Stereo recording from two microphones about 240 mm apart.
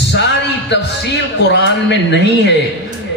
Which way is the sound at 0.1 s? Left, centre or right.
Left.